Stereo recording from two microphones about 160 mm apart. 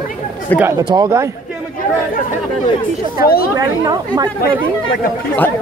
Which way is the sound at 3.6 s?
25° right (ahead or behind).